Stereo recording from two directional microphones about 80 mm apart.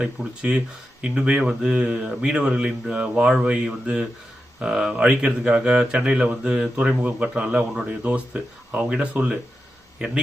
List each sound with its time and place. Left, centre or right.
0.0 s speech: centre
8.0 s speech: centre
8.7 s speech: centre